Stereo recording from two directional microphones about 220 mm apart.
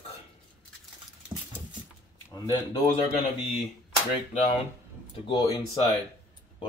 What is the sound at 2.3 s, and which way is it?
Speech, 20° left (ahead or behind).